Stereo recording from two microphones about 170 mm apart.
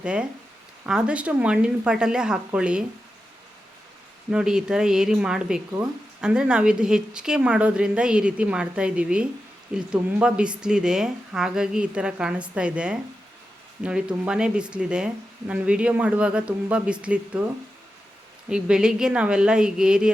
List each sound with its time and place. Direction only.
0.0 s speech: 5° right (ahead or behind)
4.3 s speech: 5° right (ahead or behind)
18.4 s speech: 5° right (ahead or behind)